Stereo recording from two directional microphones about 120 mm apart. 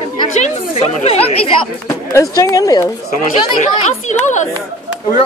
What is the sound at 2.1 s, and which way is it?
Speech, 30° left (ahead or behind).